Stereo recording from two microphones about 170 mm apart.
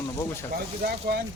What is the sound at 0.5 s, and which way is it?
Speech, 65° right (ahead or behind).